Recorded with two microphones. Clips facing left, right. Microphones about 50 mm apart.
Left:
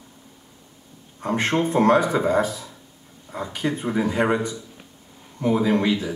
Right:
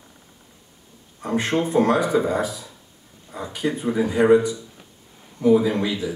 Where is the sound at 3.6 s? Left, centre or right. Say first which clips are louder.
Right 1 dB; centre.